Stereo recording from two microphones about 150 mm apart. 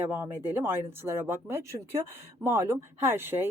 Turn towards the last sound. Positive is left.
turn(degrees=-15)  # may be behind; listen again after turning